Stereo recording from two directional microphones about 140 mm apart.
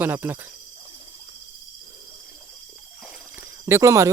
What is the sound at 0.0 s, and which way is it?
Speech, 15° right (ahead or behind).